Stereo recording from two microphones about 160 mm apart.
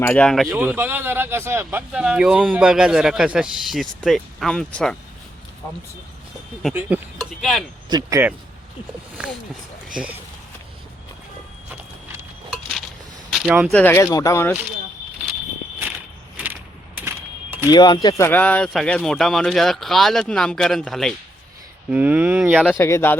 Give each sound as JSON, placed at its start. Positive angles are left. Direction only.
{"t": 0.0, "sound": "speech", "side_deg": 10}
{"t": 0.5, "sound": "speech", "side_deg": -10}
{"t": 6.7, "sound": "speech", "side_deg": -10}
{"t": 7.2, "sound": "a sound", "side_deg": 0}
{"t": 7.9, "sound": "speech", "side_deg": -25}
{"t": 9.2, "sound": "speech", "side_deg": -5}
{"t": 13.3, "sound": "speech", "side_deg": -5}
{"t": 13.7, "sound": "speech", "side_deg": 15}
{"t": 17.1, "sound": "a sound", "side_deg": -15}
{"t": 17.7, "sound": "speech", "side_deg": 25}
{"t": 21.8, "sound": "speech", "side_deg": -10}
{"t": 22.8, "sound": "speech", "side_deg": 15}